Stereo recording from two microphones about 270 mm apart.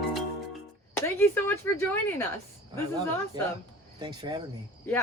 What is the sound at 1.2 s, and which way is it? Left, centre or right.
Speech, centre.